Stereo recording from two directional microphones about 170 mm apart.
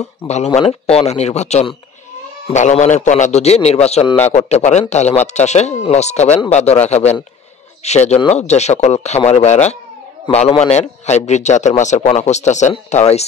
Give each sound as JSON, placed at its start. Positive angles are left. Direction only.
{"t": 0.6, "sound": "a man's voice", "side_deg": 35}